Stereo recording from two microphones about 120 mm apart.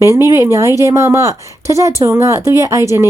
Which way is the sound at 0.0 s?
25° right (ahead or behind).